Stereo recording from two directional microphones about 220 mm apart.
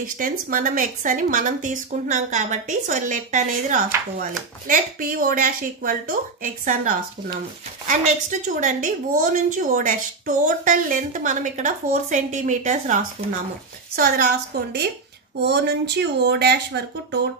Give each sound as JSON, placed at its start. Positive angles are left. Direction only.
{"t": 0.0, "sound": "a woman's voice", "side_deg": -40}